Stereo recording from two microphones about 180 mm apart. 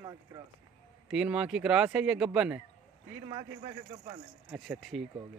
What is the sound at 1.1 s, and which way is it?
A man's voice, 5° right (ahead or behind).